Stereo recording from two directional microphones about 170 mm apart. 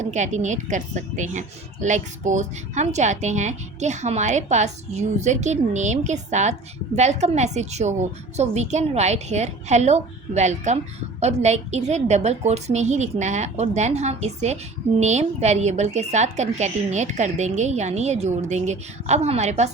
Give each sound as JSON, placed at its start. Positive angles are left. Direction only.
{"t": 0.0, "sound": "a woman's voice", "side_deg": -45}